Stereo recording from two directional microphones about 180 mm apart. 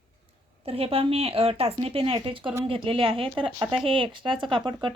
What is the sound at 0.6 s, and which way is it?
Speech, 35° right (ahead or behind).